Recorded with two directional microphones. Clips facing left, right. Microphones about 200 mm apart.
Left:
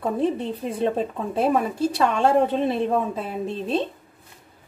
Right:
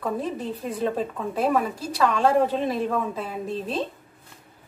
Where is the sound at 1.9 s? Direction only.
25° left (ahead or behind).